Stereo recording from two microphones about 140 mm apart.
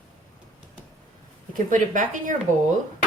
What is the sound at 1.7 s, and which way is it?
Speech, 65° right (ahead or behind).